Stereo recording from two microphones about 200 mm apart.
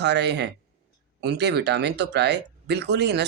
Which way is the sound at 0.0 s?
55° right (ahead or behind).